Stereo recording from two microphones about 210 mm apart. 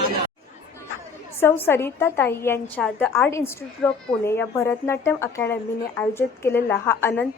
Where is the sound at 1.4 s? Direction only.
10° left (ahead or behind).